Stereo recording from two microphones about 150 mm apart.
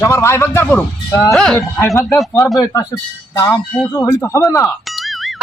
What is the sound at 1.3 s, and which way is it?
Speech, 5° left (ahead or behind).